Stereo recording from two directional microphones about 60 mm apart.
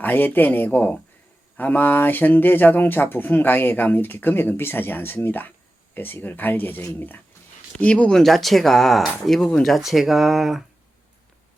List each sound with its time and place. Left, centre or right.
0.0 s speech: left
7.8 s speech: left
8.1 s speech: centre